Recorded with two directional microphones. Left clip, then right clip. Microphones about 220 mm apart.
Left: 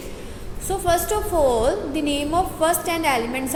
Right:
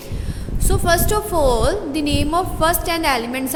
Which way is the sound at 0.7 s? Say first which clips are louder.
Right 3 dB; 20° right (ahead or behind).